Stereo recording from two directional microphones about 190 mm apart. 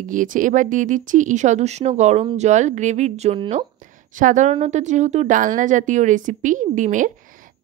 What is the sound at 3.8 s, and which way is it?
A woman's voice, 45° right (ahead or behind).